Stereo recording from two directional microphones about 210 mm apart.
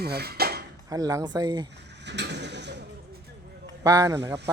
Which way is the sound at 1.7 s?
55° right (ahead or behind).